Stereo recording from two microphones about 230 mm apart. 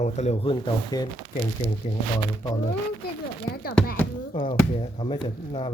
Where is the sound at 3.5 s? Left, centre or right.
Left.